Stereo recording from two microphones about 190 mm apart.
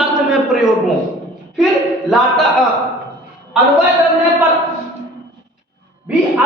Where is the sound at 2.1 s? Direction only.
Centre (ahead or behind).